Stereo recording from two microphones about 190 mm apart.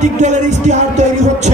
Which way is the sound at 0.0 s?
40° right (ahead or behind).